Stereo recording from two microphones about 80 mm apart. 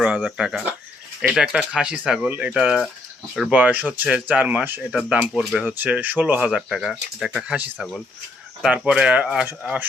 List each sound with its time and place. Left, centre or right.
0.0 s speech: centre
4.9 s speech: centre
5.7 s speech: right
6.7 s speech: centre
9.5 s speech: right